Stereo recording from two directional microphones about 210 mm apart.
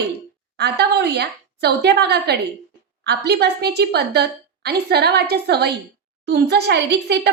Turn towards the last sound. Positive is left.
turn(degrees=-50)  # may be behind; listen again after turning